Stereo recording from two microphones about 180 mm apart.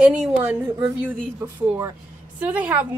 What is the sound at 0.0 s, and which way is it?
A woman's voice, 5° right (ahead or behind).